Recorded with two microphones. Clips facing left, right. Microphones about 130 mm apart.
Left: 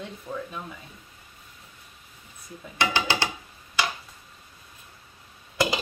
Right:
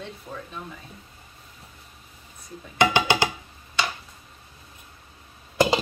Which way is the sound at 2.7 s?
15° right (ahead or behind).